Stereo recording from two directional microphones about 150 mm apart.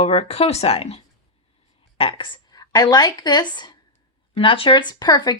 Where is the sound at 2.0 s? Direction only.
35° left (ahead or behind).